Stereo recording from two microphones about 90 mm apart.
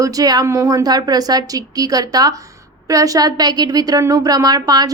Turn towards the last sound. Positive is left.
turn(degrees=-45)  # may be behind; listen again after turning